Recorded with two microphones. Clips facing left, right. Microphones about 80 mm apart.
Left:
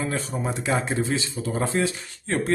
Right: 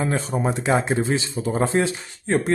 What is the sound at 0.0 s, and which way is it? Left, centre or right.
Speech, right.